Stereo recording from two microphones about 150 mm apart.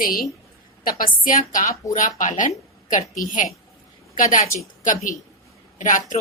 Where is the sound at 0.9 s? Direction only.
70° left (ahead or behind).